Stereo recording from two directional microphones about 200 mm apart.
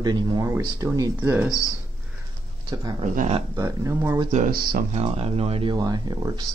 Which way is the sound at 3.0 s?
30° right (ahead or behind).